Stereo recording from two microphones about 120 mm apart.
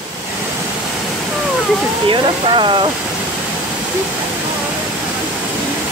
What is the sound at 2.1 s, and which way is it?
Speech, 45° right (ahead or behind).